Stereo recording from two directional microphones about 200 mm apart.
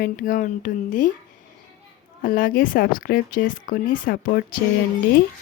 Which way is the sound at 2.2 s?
45° left (ahead or behind).